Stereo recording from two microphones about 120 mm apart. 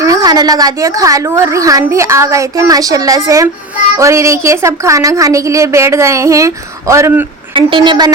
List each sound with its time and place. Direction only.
0.0 s a woman's voice: 30° right (ahead or behind)
7.5 s a woman's voice: 45° right (ahead or behind)